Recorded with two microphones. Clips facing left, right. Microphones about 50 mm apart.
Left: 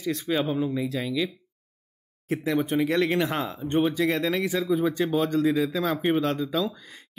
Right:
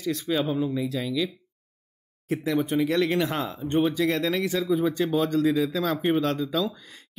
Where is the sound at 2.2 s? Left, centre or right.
Left.